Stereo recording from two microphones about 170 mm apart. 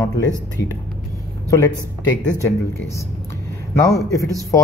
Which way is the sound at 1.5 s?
20° left (ahead or behind).